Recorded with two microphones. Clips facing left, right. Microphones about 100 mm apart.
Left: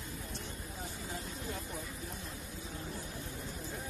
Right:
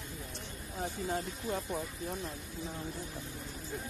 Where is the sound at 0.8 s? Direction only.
50° right (ahead or behind).